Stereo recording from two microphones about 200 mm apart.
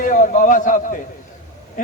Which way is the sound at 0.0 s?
40° left (ahead or behind).